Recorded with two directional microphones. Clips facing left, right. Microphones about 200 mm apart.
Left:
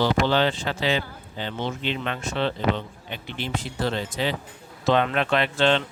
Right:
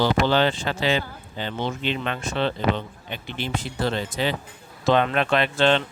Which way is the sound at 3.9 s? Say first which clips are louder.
Right 1 dB; 55° right (ahead or behind).